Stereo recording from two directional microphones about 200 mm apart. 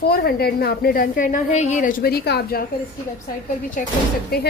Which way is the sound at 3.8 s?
40° left (ahead or behind).